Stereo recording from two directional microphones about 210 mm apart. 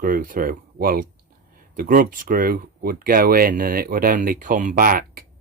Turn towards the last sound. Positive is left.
turn(degrees=-40)  # may be behind; listen again after turning